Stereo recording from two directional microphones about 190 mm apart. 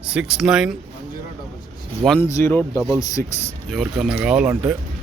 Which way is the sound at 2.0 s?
10° left (ahead or behind).